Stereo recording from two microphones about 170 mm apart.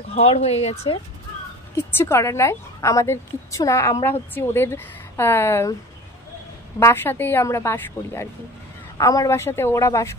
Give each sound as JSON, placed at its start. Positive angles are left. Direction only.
{"t": 0.1, "sound": "speech", "side_deg": 40}
{"t": 1.8, "sound": "a woman's voice", "side_deg": 15}
{"t": 6.8, "sound": "a woman's voice", "side_deg": 15}